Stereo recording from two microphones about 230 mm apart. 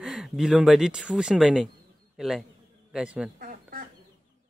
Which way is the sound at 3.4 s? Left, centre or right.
Right.